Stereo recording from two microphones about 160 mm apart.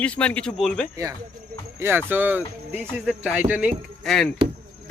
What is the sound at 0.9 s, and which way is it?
A man's voice, 20° right (ahead or behind).